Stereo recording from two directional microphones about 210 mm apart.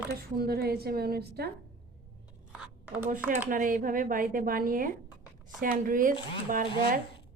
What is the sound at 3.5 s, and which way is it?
Speech, 40° right (ahead or behind).